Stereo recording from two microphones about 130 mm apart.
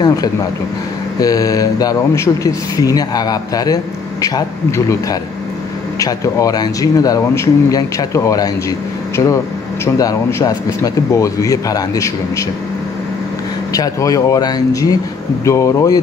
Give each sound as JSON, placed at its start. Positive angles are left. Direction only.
{"t": 0.0, "sound": "a sound", "side_deg": 30}
{"t": 1.2, "sound": "speech", "side_deg": 30}
{"t": 5.9, "sound": "speech", "side_deg": 30}
{"t": 13.7, "sound": "speech", "side_deg": 25}